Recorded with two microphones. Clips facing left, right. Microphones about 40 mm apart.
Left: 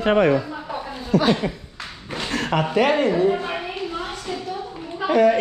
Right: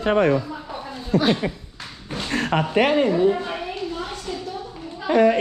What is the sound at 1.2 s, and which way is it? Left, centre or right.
Speech, centre.